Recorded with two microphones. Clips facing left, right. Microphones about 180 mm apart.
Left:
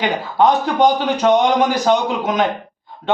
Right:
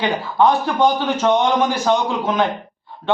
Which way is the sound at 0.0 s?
15° left (ahead or behind).